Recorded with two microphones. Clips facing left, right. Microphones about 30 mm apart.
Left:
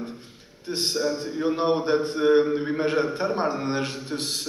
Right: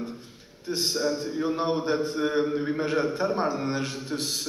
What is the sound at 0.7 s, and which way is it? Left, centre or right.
Speech, left.